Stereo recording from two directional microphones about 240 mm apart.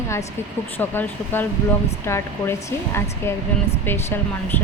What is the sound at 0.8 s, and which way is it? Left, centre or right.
Speech, centre.